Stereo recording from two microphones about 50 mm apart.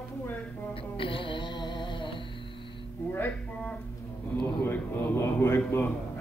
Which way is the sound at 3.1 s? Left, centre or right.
Left.